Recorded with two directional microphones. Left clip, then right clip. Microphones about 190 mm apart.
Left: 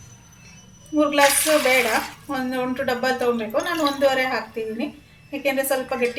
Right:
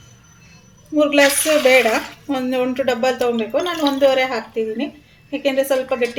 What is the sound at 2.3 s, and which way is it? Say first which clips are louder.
A woman's voice: right 5 dB; 50° right (ahead or behind).